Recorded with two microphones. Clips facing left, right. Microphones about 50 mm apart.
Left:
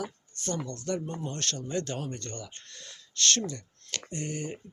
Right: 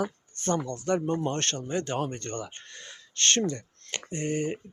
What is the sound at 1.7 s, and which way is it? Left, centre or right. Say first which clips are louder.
Speech: right 3 dB; right.